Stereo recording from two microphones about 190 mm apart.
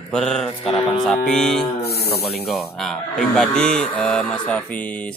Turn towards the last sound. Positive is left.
turn(degrees=5)  # may be behind; listen again after turning